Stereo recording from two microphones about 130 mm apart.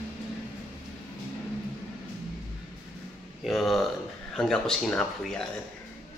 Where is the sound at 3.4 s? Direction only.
Centre (ahead or behind).